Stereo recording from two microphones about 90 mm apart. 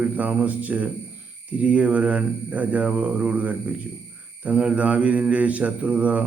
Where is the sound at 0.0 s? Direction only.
15° right (ahead or behind).